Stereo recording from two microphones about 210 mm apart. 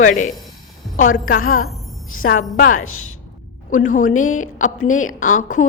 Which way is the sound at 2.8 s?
90° left.